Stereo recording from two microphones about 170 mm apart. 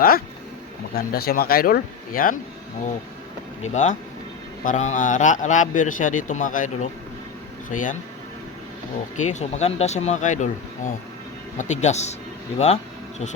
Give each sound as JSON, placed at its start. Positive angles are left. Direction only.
{"t": 0.9, "sound": "speech", "side_deg": 60}
{"t": 3.6, "sound": "a man's voice", "side_deg": 45}
{"t": 9.1, "sound": "a man's voice", "side_deg": 45}